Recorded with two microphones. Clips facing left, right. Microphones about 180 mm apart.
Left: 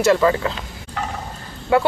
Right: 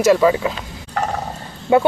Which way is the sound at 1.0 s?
50° right (ahead or behind).